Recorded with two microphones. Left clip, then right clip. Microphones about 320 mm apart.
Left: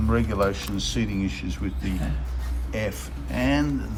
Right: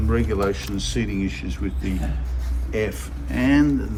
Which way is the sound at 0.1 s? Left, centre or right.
Centre.